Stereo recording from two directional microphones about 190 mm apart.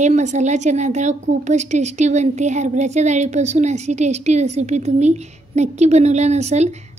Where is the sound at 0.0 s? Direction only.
35° right (ahead or behind).